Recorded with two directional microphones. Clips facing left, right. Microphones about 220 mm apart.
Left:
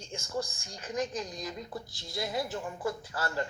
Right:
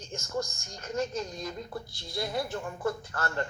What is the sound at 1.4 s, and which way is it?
A woman's voice, 5° left (ahead or behind).